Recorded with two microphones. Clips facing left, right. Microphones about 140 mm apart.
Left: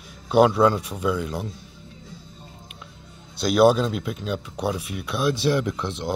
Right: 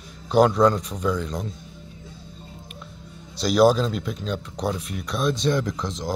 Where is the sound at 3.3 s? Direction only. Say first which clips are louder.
Even; centre (ahead or behind).